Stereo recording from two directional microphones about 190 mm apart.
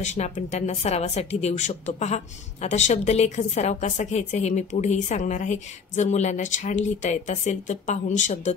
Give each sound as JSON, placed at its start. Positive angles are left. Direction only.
{"t": 0.0, "sound": "speech", "side_deg": 40}